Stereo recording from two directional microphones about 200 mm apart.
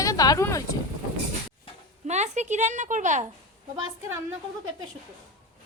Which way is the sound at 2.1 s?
35° right (ahead or behind).